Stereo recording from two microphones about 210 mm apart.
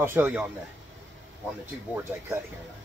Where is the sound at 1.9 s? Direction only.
10° right (ahead or behind).